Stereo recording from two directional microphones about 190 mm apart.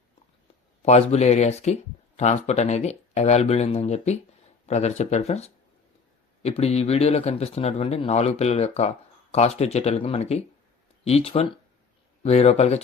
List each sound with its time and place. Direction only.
0.8 s speech: 35° left (ahead or behind)